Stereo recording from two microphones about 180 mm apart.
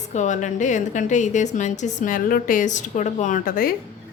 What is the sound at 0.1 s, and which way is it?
A woman's voice, 40° left (ahead or behind).